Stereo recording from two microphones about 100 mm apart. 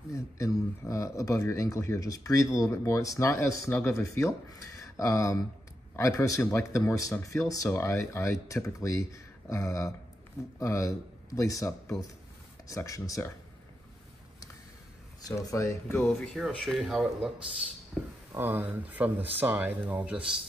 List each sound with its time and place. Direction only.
0.1 s speech: 30° left (ahead or behind)
15.2 s speech: 35° left (ahead or behind)
16.0 s speech: 5° left (ahead or behind)
18.4 s speech: 20° right (ahead or behind)